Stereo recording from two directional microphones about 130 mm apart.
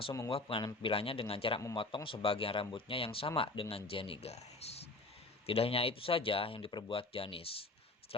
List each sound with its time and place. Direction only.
0.3 s a man's voice: 45° left (ahead or behind)